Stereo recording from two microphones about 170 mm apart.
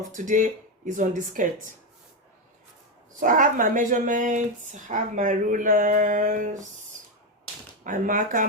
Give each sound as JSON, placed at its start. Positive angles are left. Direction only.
{"t": 0.0, "sound": "speech", "side_deg": -50}
{"t": 3.2, "sound": "speech", "side_deg": -50}
{"t": 7.9, "sound": "speech", "side_deg": -50}